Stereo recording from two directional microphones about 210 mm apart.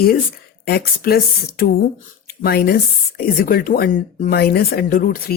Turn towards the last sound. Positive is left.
turn(degrees=45)  # may be behind; listen again after turning